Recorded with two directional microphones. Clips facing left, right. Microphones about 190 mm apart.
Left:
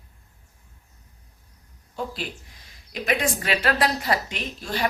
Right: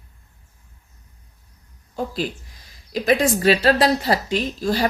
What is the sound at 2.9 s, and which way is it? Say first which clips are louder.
A woman's voice: right 7 dB; 35° right (ahead or behind).